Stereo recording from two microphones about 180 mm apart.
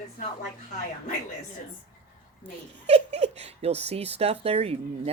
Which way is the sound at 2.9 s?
35° right (ahead or behind).